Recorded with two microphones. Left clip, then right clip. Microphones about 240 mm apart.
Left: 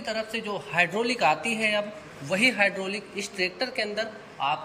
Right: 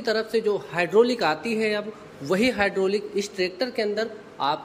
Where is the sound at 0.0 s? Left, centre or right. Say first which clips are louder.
Right 7 dB; right.